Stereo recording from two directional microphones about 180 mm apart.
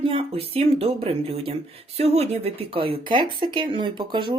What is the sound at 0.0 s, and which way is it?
Speech, 30° right (ahead or behind).